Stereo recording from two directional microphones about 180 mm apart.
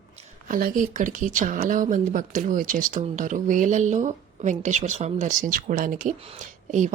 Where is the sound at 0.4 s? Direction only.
50° right (ahead or behind).